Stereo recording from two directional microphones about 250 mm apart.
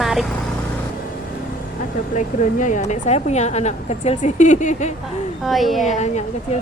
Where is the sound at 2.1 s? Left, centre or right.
Left.